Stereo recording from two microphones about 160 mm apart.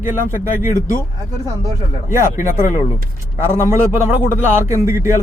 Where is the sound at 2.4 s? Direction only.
50° left (ahead or behind).